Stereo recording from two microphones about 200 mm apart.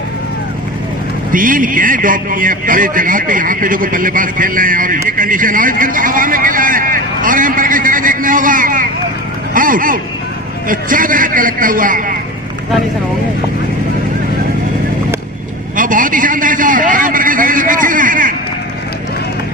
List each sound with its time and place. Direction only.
1.3 s a man's voice: 45° right (ahead or behind)
9.6 s a sound: 45° right (ahead or behind)
10.7 s a man's voice: 45° right (ahead or behind)
15.7 s a man's voice: 40° right (ahead or behind)